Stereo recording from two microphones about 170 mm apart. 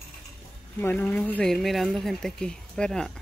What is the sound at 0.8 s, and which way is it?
Speech, 10° left (ahead or behind).